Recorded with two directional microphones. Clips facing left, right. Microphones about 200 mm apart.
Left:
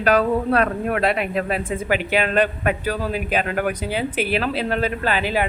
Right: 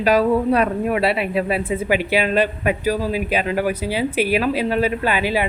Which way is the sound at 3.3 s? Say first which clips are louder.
Right 1 dB; 50° left (ahead or behind).